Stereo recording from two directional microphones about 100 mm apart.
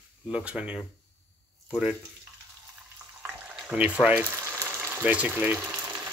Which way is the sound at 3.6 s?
10° right (ahead or behind).